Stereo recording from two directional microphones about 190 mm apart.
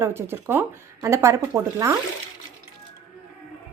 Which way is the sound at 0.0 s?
10° right (ahead or behind).